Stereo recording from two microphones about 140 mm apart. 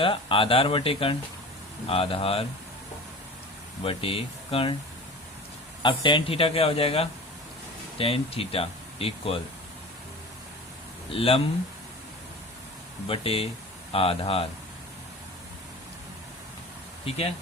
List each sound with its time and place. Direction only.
0.0 s speech: 40° left (ahead or behind)
3.8 s speech: 40° left (ahead or behind)
5.8 s speech: 35° left (ahead or behind)
11.1 s speech: 40° left (ahead or behind)
13.1 s speech: 45° left (ahead or behind)